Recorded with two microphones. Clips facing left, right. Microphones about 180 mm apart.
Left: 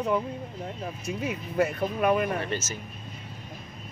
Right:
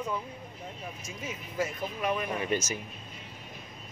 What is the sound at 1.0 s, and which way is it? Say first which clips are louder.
Speech: left 11 dB; 65° left (ahead or behind).